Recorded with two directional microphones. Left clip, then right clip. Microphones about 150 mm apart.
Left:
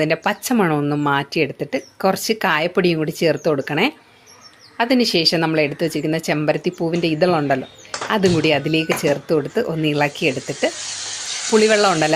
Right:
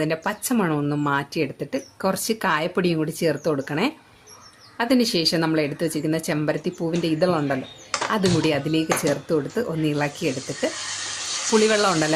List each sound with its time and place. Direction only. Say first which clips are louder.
0.0 s speech: left 6 dB; 20° left (ahead or behind)
11.5 s speech: left 5 dB; 5° left (ahead or behind)